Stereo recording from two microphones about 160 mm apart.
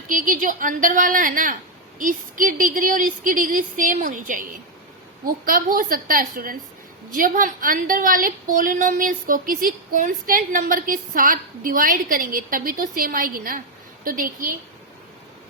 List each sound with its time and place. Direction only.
0.1 s a woman's voice: 55° right (ahead or behind)